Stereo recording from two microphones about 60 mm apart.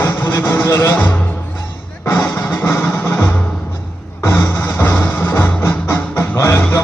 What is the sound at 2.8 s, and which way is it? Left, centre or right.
Music, left.